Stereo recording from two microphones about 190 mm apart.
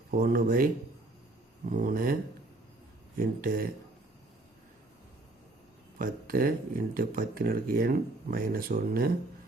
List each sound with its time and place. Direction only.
0.1 s speech: 50° right (ahead or behind)
1.7 s speech: 45° right (ahead or behind)
3.2 s speech: 50° right (ahead or behind)
6.0 s speech: 45° right (ahead or behind)